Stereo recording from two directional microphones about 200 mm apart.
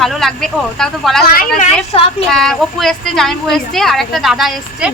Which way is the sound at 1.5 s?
30° left (ahead or behind).